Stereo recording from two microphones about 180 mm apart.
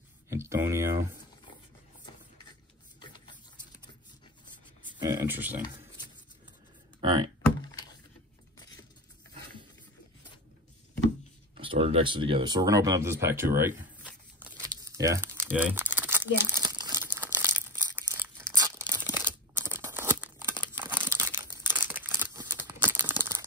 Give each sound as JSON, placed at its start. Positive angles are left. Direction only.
{"t": 0.3, "sound": "speech", "side_deg": -15}
{"t": 3.0, "sound": "a sound", "side_deg": 25}
{"t": 4.9, "sound": "speech", "side_deg": -15}
{"t": 7.0, "sound": "speech", "side_deg": -25}
{"t": 11.5, "sound": "speech", "side_deg": -30}
{"t": 14.4, "sound": "crumpling", "side_deg": -20}
{"t": 18.9, "sound": "tearing", "side_deg": -10}
{"t": 20.7, "sound": "crumpling", "side_deg": -10}